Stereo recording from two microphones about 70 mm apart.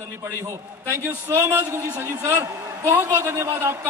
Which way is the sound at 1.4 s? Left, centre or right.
Right.